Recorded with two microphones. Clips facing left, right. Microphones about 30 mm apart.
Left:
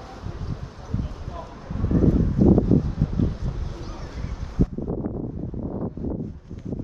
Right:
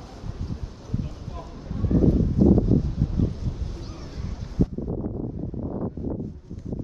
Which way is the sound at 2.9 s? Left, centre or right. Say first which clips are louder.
Left 1 dB; left.